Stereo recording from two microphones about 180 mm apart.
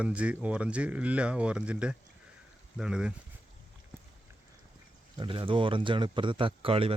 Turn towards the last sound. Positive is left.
turn(degrees=-30)  # may be behind; listen again after turning